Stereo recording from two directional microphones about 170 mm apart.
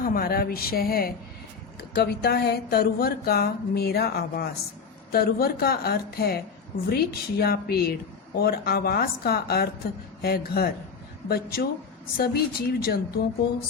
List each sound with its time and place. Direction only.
0.0 s a woman's voice: 60° left (ahead or behind)
2.0 s a sound: 70° left (ahead or behind)
5.1 s a woman's voice: 65° left (ahead or behind)